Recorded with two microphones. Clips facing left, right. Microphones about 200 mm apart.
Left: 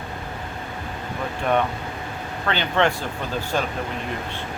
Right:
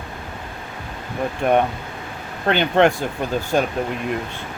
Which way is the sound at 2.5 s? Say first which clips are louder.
Right 6 dB; 50° right (ahead or behind).